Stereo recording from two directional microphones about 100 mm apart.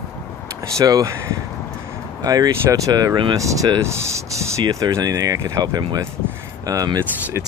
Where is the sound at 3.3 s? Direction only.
35° right (ahead or behind).